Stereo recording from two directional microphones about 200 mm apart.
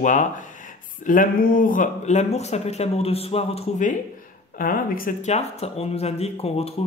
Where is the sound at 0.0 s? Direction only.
40° left (ahead or behind).